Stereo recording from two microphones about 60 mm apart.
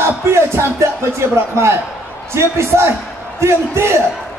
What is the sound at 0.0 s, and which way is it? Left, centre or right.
Music, right.